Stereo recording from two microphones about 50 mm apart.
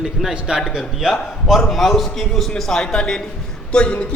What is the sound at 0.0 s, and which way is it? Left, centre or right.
A man's voice, centre.